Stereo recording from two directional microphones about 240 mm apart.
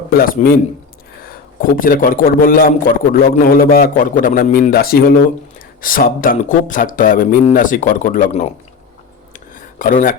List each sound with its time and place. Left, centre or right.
0.1 s a man's voice: left
1.7 s a man's voice: left
9.3 s a sound: left